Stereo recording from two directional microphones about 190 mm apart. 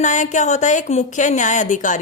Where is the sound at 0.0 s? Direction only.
40° left (ahead or behind).